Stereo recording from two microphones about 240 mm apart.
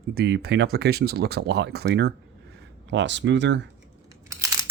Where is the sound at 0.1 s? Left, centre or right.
Right.